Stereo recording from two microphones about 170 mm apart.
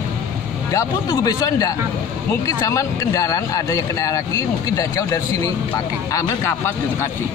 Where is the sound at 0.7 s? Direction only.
20° left (ahead or behind).